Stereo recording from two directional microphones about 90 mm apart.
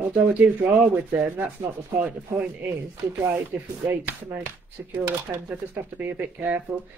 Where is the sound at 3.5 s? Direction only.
20° right (ahead or behind).